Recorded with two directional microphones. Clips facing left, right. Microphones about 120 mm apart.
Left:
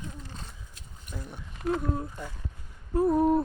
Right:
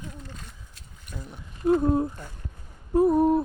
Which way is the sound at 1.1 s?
5° right (ahead or behind).